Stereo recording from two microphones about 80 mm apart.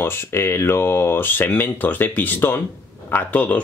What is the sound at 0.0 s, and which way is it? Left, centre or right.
Speech, left.